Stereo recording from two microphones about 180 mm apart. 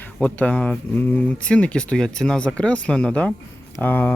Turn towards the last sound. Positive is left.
turn(degrees=10)  # may be behind; listen again after turning